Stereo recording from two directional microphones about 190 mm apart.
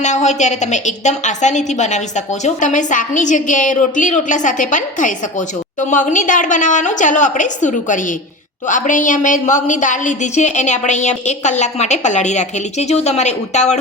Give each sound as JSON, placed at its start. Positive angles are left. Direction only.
{"t": 0.0, "sound": "a woman's voice", "side_deg": 40}